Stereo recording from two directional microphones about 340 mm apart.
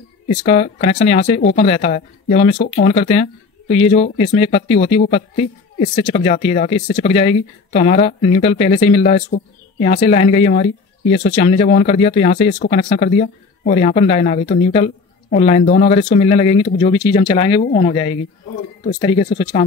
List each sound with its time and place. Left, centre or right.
0.5 s speech: centre